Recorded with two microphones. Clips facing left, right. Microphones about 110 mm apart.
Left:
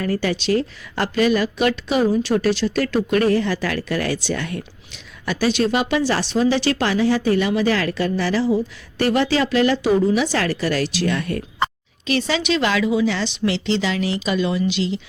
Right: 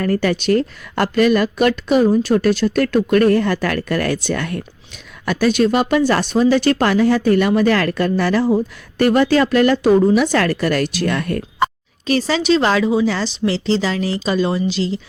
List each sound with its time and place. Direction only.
0.0 s a woman's voice: 50° right (ahead or behind)
12.0 s a woman's voice: 40° right (ahead or behind)